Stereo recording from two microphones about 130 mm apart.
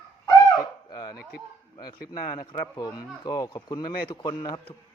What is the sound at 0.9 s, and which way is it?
Speech, 30° left (ahead or behind).